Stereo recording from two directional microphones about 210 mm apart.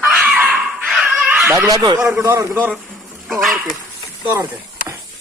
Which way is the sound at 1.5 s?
15° right (ahead or behind).